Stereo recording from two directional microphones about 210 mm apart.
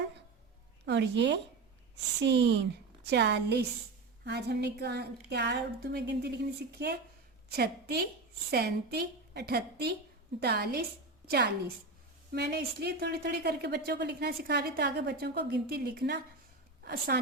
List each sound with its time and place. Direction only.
0.9 s a woman's voice: 55° right (ahead or behind)
12.3 s a woman's voice: 50° right (ahead or behind)